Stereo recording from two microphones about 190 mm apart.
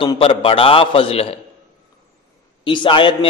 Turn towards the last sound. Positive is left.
turn(degrees=25)  # may be behind; listen again after turning